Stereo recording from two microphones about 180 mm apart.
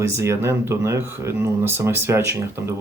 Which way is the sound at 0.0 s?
15° right (ahead or behind).